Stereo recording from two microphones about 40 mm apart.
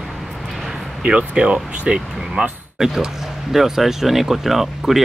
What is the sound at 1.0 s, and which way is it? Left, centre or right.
Speech, right.